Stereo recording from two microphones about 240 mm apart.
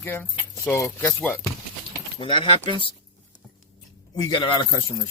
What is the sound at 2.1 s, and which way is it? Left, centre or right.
Speech, left.